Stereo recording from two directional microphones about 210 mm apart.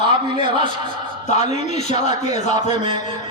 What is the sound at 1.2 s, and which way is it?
A man's voice, 35° left (ahead or behind).